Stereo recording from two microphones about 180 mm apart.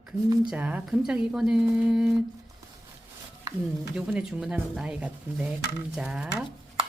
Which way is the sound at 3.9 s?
5° right (ahead or behind).